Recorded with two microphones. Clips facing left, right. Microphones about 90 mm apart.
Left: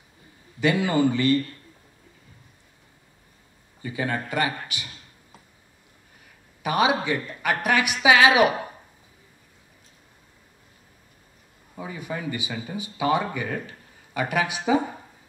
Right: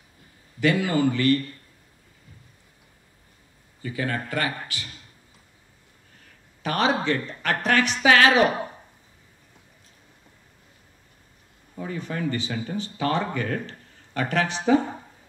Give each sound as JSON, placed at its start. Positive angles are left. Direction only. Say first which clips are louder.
{"t": 0.6, "sound": "speech", "louder": "even", "side_deg": 20}
{"t": 3.8, "sound": "speech", "louder": "left 1 dB", "side_deg": 20}
{"t": 6.6, "sound": "speech", "louder": "left 1 dB", "side_deg": 10}
{"t": 11.7, "sound": "speech", "louder": "right 1 dB", "side_deg": 10}